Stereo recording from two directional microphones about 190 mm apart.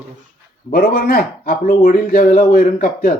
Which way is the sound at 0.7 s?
50° left (ahead or behind).